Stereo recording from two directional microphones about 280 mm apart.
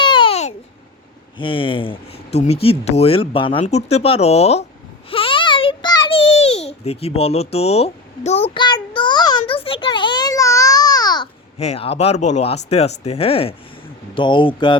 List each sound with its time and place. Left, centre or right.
0.0 s babbling: centre
1.4 s speech: centre
5.1 s a sound: centre
8.5 s child singing: centre
9.5 s a sound: centre
14.2 s speech: centre